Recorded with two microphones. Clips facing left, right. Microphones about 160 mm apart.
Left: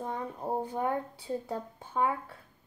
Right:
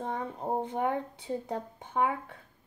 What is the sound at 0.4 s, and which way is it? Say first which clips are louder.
A woman's voice: right 1 dB; 25° right (ahead or behind).